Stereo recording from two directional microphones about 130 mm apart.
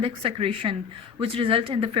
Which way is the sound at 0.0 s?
45° right (ahead or behind).